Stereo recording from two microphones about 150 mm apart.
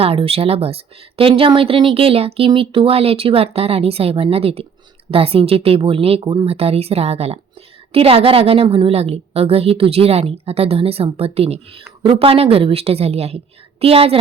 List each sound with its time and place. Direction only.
0.0 s a woman's voice: 40° right (ahead or behind)